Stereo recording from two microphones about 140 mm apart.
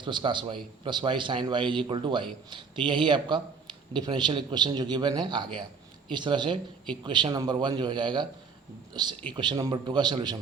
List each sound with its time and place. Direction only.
0.0 s a man's voice: 35° right (ahead or behind)
9.3 s a man's voice: 30° right (ahead or behind)